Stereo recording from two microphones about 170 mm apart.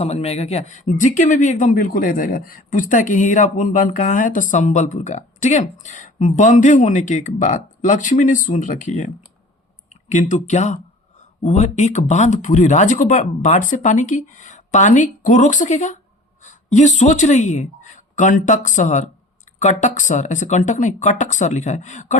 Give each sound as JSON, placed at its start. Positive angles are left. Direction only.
{"t": 0.0, "sound": "speech", "side_deg": 35}
{"t": 10.1, "sound": "speech", "side_deg": 45}